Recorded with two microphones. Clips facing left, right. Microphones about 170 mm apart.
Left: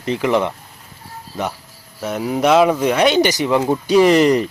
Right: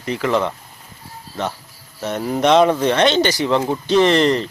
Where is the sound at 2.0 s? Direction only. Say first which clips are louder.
Left 1 dB; 5° left (ahead or behind).